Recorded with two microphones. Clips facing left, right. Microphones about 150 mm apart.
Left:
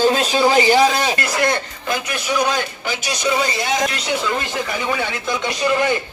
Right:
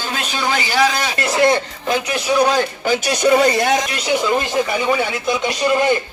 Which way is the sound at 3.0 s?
55° right (ahead or behind).